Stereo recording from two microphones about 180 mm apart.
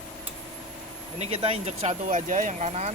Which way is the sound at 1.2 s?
35° right (ahead or behind).